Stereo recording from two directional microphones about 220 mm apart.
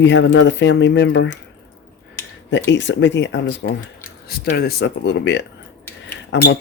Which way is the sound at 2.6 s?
55° left (ahead or behind).